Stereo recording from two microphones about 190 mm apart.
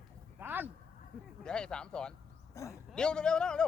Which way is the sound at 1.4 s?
5° left (ahead or behind).